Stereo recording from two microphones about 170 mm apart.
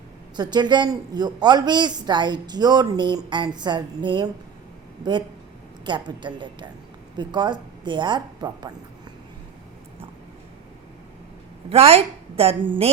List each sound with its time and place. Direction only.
0.3 s a woman's voice: 25° right (ahead or behind)
5.8 s a woman's voice: 25° right (ahead or behind)
11.7 s a woman's voice: 35° right (ahead or behind)